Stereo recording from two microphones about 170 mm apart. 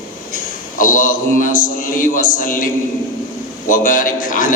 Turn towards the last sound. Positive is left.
turn(degrees=55)  # may be behind; listen again after turning